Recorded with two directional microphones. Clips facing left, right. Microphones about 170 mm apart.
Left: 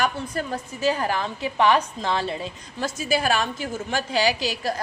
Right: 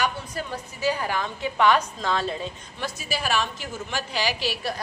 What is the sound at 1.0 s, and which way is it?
A woman's voice, 35° left (ahead or behind).